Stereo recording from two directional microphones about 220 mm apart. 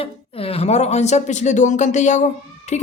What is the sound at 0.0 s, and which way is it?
Speech, 25° left (ahead or behind).